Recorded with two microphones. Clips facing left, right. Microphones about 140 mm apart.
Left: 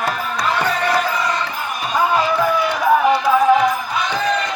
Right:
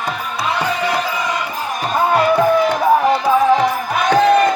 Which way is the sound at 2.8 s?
35° right (ahead or behind).